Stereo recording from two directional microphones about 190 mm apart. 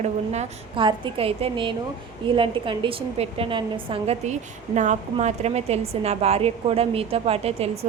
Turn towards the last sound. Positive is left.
turn(degrees=-30)  # may be behind; listen again after turning